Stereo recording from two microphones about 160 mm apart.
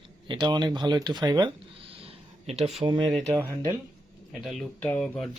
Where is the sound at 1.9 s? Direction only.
35° right (ahead or behind).